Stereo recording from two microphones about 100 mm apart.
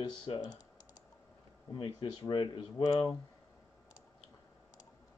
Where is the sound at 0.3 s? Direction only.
60° left (ahead or behind).